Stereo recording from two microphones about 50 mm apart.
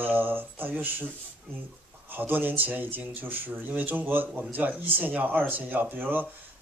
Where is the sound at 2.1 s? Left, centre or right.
Right.